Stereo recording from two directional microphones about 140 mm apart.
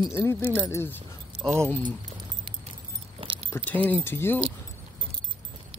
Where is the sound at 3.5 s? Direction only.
15° left (ahead or behind).